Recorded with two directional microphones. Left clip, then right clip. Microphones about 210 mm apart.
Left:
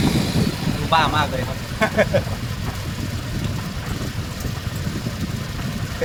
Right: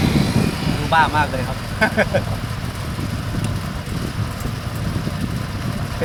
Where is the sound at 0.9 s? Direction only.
Centre (ahead or behind).